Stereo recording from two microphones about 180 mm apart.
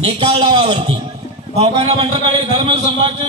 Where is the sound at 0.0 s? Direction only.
30° right (ahead or behind).